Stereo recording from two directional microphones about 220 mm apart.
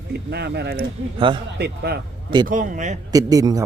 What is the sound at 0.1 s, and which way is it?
Speech, 50° right (ahead or behind).